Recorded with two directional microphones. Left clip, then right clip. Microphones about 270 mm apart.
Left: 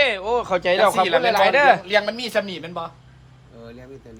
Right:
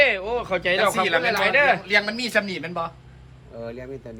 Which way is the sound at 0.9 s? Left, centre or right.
Left.